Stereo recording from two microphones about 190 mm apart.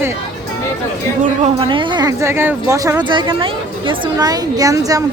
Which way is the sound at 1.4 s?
25° right (ahead or behind).